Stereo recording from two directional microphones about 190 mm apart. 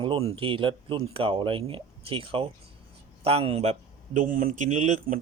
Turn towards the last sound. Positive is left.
turn(degrees=-40)  # may be behind; listen again after turning